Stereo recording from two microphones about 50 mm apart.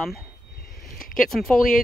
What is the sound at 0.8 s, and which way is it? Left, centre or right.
Speech, centre.